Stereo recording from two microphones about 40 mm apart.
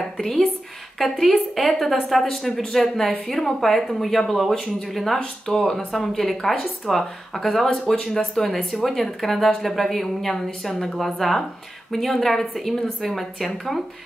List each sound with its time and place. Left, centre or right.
0.9 s a woman's voice: centre